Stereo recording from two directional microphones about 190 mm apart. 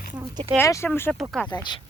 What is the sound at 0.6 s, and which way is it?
Speech, 15° left (ahead or behind).